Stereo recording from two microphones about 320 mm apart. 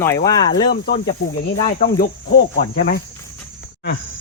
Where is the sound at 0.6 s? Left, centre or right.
Left.